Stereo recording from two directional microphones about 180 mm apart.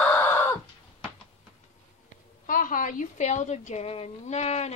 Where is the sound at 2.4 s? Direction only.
50° left (ahead or behind).